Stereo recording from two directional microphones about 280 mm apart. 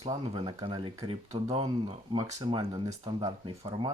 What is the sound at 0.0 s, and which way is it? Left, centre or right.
Speech, centre.